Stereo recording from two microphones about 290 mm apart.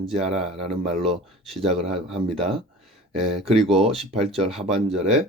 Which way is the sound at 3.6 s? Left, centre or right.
Right.